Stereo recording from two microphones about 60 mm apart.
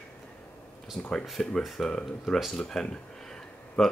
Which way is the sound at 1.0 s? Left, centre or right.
Centre.